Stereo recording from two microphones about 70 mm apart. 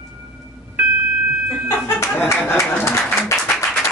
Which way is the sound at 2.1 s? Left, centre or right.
Left.